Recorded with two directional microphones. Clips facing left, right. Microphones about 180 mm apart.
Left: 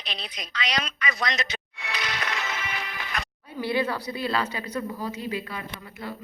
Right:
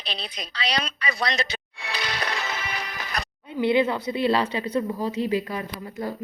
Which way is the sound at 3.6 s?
20° right (ahead or behind).